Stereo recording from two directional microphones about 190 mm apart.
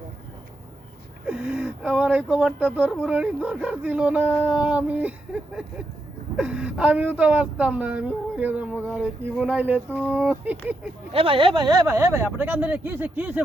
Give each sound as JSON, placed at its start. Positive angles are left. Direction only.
{"t": 1.3, "sound": "speech", "side_deg": -5}
{"t": 11.1, "sound": "speech", "side_deg": -30}